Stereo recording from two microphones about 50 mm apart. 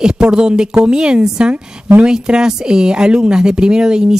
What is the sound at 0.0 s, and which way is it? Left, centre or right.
Speech, centre.